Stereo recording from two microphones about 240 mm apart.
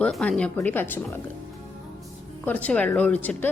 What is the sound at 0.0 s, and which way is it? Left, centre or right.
A woman's voice, centre.